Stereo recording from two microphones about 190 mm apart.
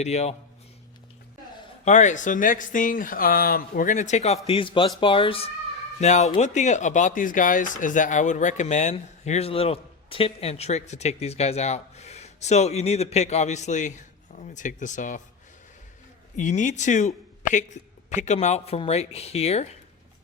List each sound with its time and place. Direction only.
0.0 s speech: 35° left (ahead or behind)
1.8 s speech: 40° left (ahead or behind)
16.4 s speech: 40° left (ahead or behind)